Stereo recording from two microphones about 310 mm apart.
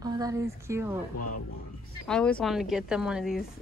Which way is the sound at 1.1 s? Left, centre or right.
Left.